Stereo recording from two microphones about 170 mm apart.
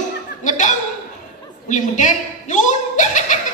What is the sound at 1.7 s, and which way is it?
Chuckle, 45° left (ahead or behind).